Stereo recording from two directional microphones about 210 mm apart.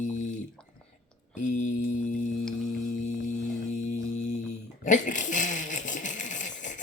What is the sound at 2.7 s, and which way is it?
Hum, 40° left (ahead or behind).